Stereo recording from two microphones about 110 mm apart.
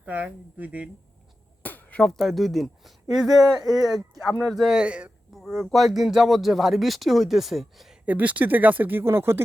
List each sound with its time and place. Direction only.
0.0 s speech: 15° right (ahead or behind)
1.6 s speech: 15° left (ahead or behind); by 5.1 s 10° right (ahead or behind)
5.3 s speech: centre (ahead or behind)
8.0 s speech: 15° right (ahead or behind)